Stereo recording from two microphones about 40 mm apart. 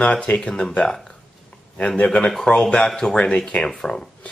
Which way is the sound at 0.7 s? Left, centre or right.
Centre.